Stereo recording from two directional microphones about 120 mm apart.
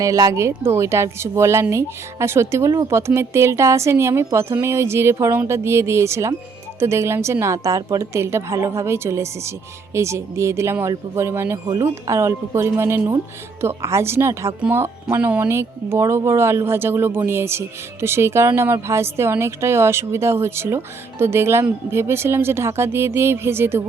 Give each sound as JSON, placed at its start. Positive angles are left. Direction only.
{"t": 0.0, "sound": "speech", "side_deg": -30}